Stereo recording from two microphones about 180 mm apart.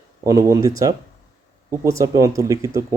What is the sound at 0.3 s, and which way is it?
Speech, 15° right (ahead or behind).